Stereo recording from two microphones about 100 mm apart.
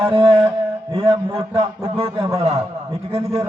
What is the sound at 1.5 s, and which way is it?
Speech, 70° right (ahead or behind).